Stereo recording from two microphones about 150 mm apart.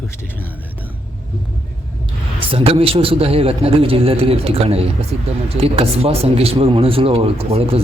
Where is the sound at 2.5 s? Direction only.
40° right (ahead or behind).